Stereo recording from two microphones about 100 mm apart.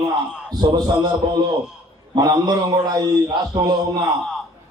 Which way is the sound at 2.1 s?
45° right (ahead or behind).